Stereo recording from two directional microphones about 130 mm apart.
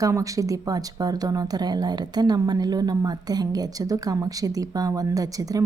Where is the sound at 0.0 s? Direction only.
25° right (ahead or behind).